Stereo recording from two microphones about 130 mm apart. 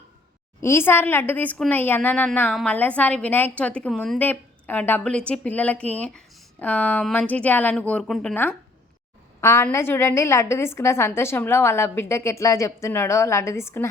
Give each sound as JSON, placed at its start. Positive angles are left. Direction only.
{"t": 0.6, "sound": "a woman's voice", "side_deg": 20}
{"t": 9.4, "sound": "a woman's voice", "side_deg": 20}